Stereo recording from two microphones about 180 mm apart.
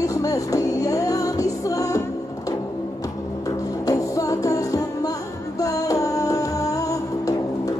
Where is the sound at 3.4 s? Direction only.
20° left (ahead or behind).